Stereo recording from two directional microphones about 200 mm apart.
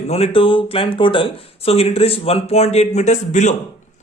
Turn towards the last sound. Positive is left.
turn(degrees=35)  # may be behind; listen again after turning